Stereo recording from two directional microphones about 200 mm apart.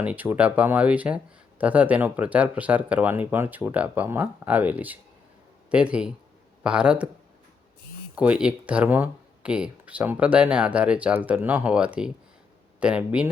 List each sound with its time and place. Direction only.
0.0 s speech: 10° right (ahead or behind)
8.1 s speech: 5° right (ahead or behind)